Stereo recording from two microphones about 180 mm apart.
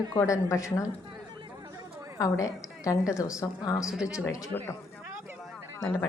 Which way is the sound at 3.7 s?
5° right (ahead or behind).